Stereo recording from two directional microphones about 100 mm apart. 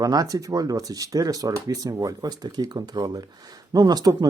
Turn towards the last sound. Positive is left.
turn(degrees=-40)  # may be behind; listen again after turning